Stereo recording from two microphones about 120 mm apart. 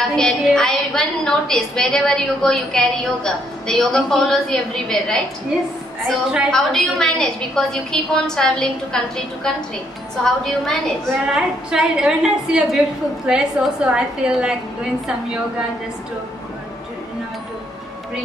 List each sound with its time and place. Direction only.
0.1 s a woman's voice: 5° left (ahead or behind)
6.0 s a woman's voice: 5° right (ahead or behind)
6.5 s a woman's voice: 5° left (ahead or behind)
11.3 s a woman's voice: 5° right (ahead or behind)